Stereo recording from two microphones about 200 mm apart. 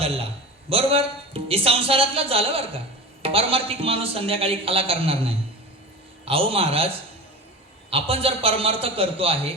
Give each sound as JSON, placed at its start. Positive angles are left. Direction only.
{"t": 0.0, "sound": "a man's voice", "side_deg": -30}